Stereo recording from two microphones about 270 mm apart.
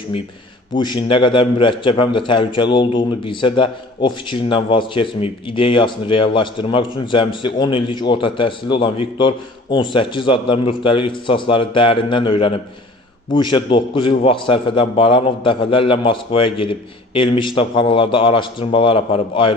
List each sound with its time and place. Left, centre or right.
0.8 s a man's voice: centre